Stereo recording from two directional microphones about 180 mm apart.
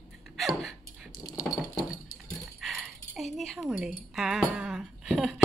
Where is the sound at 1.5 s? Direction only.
20° left (ahead or behind).